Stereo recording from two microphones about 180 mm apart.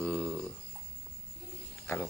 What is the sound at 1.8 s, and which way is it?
Snake, 10° left (ahead or behind).